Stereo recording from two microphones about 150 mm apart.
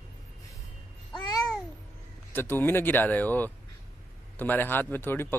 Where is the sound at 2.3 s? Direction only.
15° left (ahead or behind).